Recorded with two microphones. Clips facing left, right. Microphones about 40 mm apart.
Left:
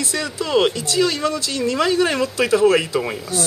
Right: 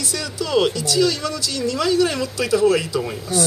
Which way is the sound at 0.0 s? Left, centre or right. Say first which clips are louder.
Left 2 dB; left.